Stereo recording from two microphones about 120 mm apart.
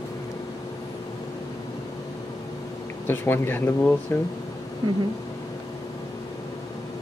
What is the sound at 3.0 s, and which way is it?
Speech, 15° left (ahead or behind).